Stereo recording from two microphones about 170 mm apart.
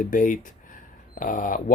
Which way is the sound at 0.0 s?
50° left (ahead or behind).